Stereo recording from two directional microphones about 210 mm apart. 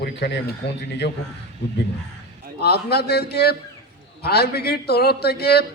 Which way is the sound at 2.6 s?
50° left (ahead or behind).